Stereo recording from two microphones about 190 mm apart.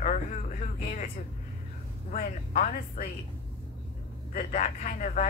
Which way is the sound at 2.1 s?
40° left (ahead or behind).